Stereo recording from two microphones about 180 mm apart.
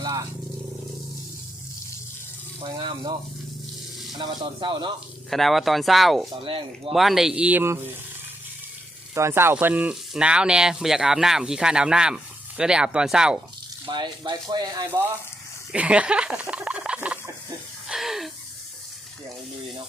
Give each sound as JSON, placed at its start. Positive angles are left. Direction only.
{"t": 0.0, "sound": "vehicle", "side_deg": -20}
{"t": 2.6, "sound": "speech", "side_deg": -25}
{"t": 4.2, "sound": "speech", "side_deg": -25}
{"t": 5.3, "sound": "speech", "side_deg": 0}
{"t": 6.4, "sound": "speech", "side_deg": -30}
{"t": 6.9, "sound": "speech", "side_deg": 0}
{"t": 9.1, "sound": "speech", "side_deg": -15}
{"t": 13.8, "sound": "speech", "side_deg": -25}
{"t": 15.7, "sound": "a sound", "side_deg": -5}